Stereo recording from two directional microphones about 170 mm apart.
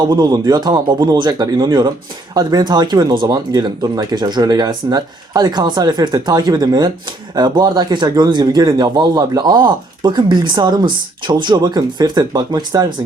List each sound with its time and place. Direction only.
0.1 s speech: 25° right (ahead or behind)